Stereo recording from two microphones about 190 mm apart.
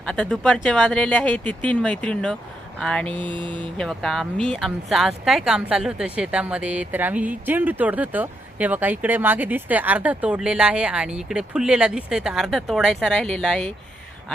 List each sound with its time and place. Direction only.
0.0 s speech: 5° left (ahead or behind)
3.2 s a sound: 25° right (ahead or behind)
3.8 s speech: centre (ahead or behind)